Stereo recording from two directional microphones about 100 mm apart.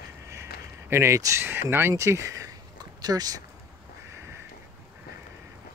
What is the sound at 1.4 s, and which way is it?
Speech, 20° right (ahead or behind).